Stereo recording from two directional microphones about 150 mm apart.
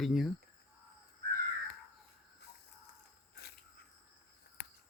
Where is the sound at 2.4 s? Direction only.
90° left.